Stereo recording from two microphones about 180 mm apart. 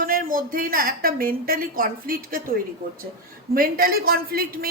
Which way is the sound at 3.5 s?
55° right (ahead or behind).